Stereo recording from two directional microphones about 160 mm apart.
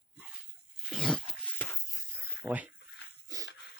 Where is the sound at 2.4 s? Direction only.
10° right (ahead or behind).